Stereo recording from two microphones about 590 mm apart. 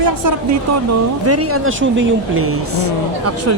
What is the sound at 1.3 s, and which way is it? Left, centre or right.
Speech, right.